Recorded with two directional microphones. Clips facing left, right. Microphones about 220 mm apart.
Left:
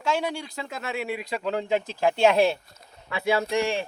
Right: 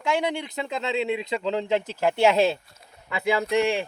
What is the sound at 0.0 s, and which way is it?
Speech, 15° right (ahead or behind).